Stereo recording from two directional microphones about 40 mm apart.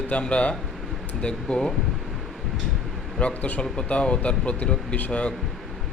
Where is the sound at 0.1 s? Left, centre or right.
Left.